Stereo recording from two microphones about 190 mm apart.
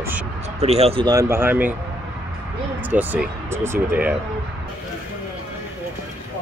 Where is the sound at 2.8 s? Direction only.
10° right (ahead or behind).